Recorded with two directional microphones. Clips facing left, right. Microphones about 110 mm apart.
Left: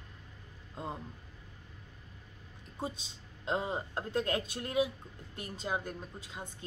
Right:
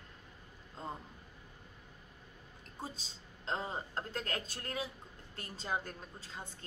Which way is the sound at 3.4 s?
15° left (ahead or behind).